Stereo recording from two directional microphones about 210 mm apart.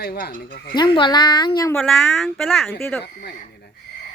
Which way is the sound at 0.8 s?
20° left (ahead or behind).